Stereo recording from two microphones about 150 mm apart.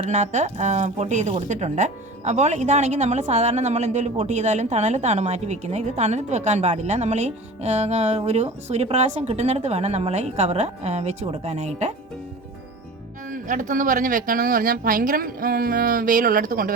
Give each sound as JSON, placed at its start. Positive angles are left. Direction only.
{"t": 0.0, "sound": "speech", "side_deg": -50}
{"t": 13.3, "sound": "speech", "side_deg": -60}